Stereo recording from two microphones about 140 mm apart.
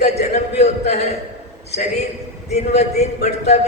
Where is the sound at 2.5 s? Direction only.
50° left (ahead or behind).